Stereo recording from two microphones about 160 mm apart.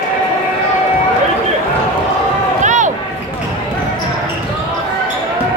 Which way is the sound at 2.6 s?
50° right (ahead or behind).